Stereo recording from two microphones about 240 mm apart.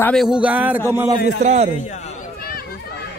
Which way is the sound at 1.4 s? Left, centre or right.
Right.